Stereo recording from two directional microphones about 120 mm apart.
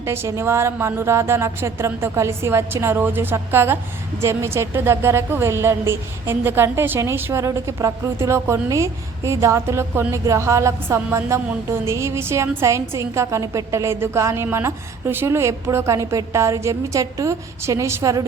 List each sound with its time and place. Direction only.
0.0 s a woman's voice: 20° right (ahead or behind)